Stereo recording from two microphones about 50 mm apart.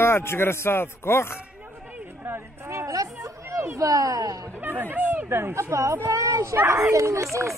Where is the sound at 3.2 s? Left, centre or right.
Right.